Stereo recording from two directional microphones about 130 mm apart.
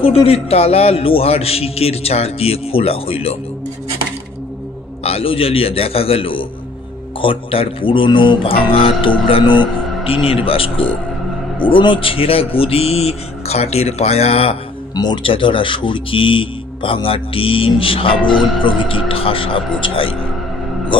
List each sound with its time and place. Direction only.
0.0 s speech: 45° left (ahead or behind)
5.0 s speech: 45° left (ahead or behind)
15.0 s speech: 40° left (ahead or behind)